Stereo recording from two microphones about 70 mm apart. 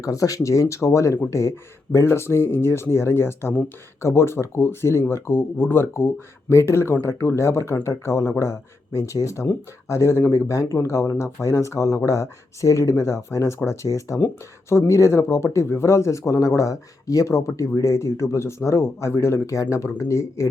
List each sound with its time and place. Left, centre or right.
0.0 s speech: left